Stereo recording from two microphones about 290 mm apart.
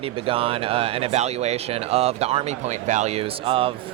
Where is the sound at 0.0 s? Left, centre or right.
Centre.